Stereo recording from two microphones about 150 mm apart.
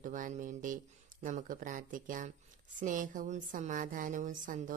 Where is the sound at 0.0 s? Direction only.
60° right (ahead or behind).